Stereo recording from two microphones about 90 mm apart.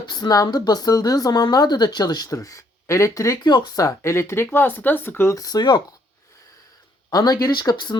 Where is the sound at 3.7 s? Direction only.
35° left (ahead or behind).